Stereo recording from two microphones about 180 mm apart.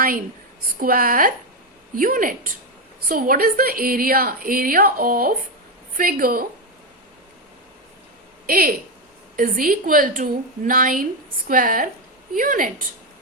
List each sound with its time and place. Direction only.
0.8 s a woman's voice: 55° right (ahead or behind)
8.4 s a woman's voice: 55° right (ahead or behind)